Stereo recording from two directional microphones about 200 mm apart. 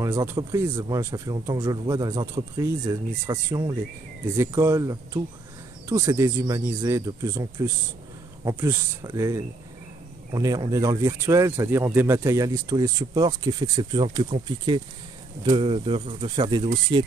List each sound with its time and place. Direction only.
0.0 s speech: 15° right (ahead or behind)